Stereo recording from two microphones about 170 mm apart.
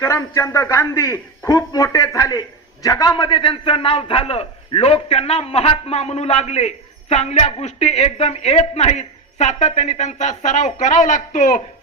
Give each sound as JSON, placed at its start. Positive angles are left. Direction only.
{"t": 0.0, "sound": "a man's voice", "side_deg": 15}